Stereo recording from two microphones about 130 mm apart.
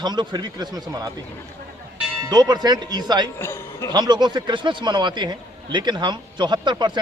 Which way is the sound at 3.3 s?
20° left (ahead or behind).